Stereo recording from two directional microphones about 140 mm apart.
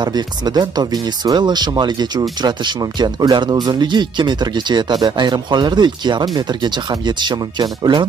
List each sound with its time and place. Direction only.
0.0 s speech: 30° right (ahead or behind)